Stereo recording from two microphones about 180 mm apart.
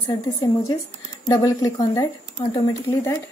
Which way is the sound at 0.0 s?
20° left (ahead or behind).